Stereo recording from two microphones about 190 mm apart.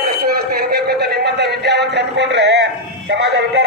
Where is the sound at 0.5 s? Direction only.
55° right (ahead or behind).